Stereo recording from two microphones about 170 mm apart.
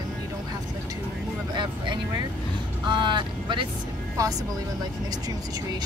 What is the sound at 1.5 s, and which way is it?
Vehicle, 25° right (ahead or behind).